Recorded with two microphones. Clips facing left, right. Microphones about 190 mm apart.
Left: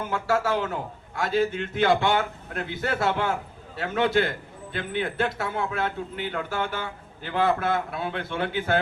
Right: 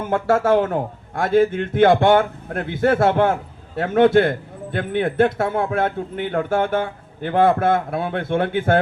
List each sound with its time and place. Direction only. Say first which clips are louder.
0.1 s a man's voice: right 9 dB; 50° right (ahead or behind)